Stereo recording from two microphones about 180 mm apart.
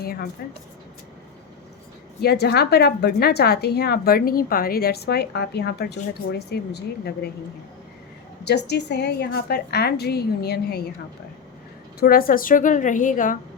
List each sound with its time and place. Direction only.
0.0 s a woman's voice: 55° left (ahead or behind)
2.2 s speech: 65° left (ahead or behind)
8.4 s speech: 65° left (ahead or behind)
11.9 s a woman's voice: 55° left (ahead or behind)